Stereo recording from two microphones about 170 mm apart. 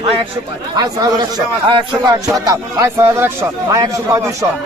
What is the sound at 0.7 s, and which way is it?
A man's voice, 25° right (ahead or behind).